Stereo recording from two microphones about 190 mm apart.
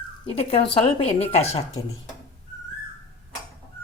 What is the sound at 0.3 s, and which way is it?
A woman's voice, 30° left (ahead or behind).